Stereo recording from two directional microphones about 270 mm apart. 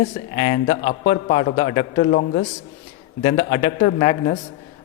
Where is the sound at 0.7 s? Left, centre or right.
Left.